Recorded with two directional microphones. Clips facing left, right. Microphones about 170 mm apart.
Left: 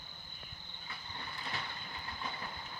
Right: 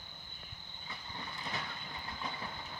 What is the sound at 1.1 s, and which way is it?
Vehicle, 20° right (ahead or behind).